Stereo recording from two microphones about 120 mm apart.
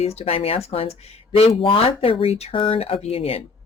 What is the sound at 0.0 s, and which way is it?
Speech, 60° left (ahead or behind).